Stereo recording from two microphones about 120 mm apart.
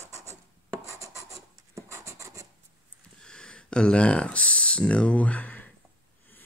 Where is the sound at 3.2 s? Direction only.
5° left (ahead or behind).